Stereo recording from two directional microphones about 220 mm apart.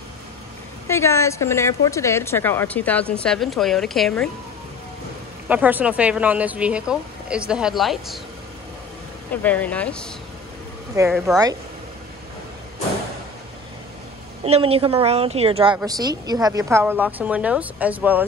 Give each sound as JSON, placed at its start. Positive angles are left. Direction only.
{"t": 0.8, "sound": "speech", "side_deg": 10}
{"t": 5.5, "sound": "a woman's voice", "side_deg": -5}
{"t": 9.3, "sound": "speech", "side_deg": 5}
{"t": 11.1, "sound": "a woman's voice", "side_deg": 0}
{"t": 14.4, "sound": "a woman's voice", "side_deg": -25}